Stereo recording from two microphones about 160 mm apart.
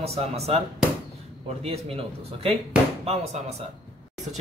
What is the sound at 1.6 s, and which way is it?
Speech, 35° right (ahead or behind).